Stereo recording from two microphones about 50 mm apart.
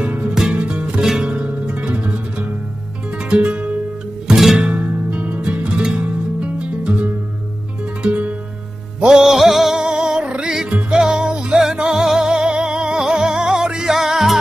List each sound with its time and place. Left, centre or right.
0.0 s music: right
0.3 s music: centre
9.2 s music: centre
9.8 s music: centre